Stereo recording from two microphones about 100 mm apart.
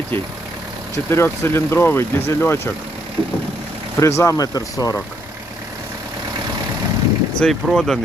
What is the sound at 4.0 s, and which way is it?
Speech, 30° left (ahead or behind).